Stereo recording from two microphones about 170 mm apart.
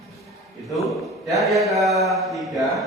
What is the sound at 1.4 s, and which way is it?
A man's voice, centre (ahead or behind).